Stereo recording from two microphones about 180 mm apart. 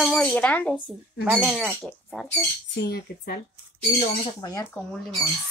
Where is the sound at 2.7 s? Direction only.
65° left (ahead or behind).